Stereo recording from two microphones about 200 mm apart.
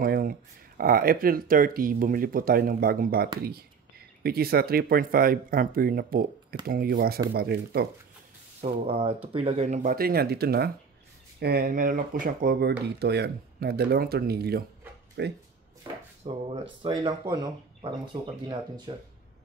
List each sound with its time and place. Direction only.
0.0 s speech: 45° right (ahead or behind)
8.5 s speech: 30° right (ahead or behind); by 15.3 s 60° right (ahead or behind)
16.3 s speech: 30° right (ahead or behind)